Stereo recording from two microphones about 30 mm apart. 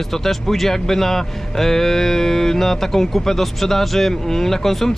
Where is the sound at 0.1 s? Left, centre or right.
Centre.